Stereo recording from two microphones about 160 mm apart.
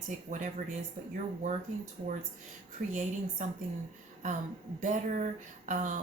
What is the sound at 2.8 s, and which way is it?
Speech, 60° right (ahead or behind).